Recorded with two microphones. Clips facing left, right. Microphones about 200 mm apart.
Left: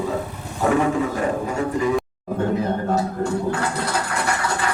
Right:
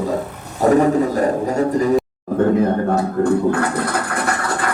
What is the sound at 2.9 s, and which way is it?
Speech, 55° right (ahead or behind).